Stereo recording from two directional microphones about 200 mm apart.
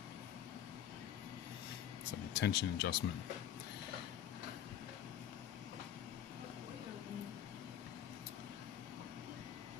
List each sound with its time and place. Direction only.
2.3 s speech: 55° left (ahead or behind)